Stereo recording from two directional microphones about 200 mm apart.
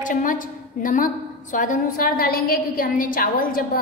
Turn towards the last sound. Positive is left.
turn(degrees=45)  # may be behind; listen again after turning